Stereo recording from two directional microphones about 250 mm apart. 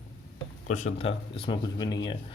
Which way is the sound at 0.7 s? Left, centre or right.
Left.